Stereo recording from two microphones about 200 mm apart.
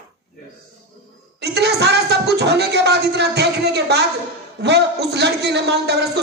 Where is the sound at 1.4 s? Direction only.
55° right (ahead or behind).